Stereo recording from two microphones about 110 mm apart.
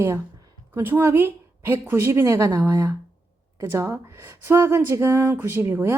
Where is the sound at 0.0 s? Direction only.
25° right (ahead or behind).